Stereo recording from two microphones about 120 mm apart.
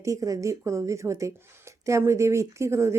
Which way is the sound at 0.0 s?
25° right (ahead or behind).